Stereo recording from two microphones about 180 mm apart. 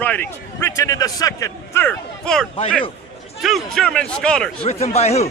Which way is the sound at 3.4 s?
Centre (ahead or behind).